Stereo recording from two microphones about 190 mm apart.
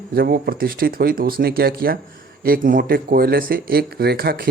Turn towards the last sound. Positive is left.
turn(degrees=-50)  # may be behind; listen again after turning